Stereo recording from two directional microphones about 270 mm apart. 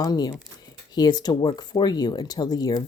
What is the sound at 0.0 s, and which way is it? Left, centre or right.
Speech, centre.